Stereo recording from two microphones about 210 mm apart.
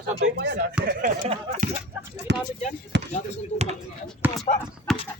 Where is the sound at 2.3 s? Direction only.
55° right (ahead or behind).